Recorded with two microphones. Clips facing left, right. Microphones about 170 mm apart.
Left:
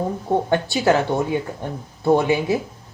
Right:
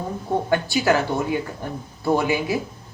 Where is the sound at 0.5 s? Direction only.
25° left (ahead or behind).